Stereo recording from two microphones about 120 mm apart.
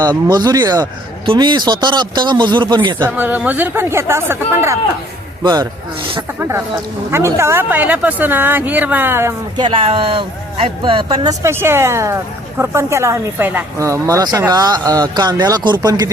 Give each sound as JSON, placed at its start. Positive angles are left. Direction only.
{"t": 0.3, "sound": "speech", "side_deg": -35}
{"t": 1.2, "sound": "speech", "side_deg": -40}
{"t": 3.0, "sound": "speech", "side_deg": -15}
{"t": 5.4, "sound": "speech", "side_deg": -35}
{"t": 7.1, "sound": "speech", "side_deg": -20}
{"t": 9.6, "sound": "speech", "side_deg": -45}
{"t": 11.3, "sound": "speech", "side_deg": -20}